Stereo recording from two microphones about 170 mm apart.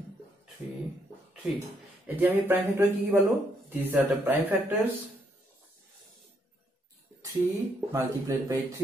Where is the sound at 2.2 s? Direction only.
10° right (ahead or behind).